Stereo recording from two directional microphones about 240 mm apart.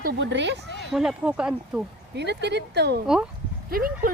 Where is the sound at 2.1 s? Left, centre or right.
Right.